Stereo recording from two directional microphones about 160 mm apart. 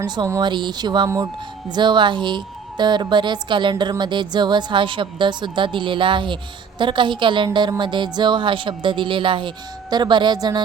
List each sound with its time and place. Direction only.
0.2 s speech: 25° right (ahead or behind)